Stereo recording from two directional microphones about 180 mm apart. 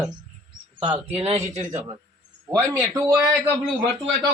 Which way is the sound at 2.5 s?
15° right (ahead or behind).